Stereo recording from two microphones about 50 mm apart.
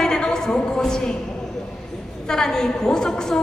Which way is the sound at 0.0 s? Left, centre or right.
Centre.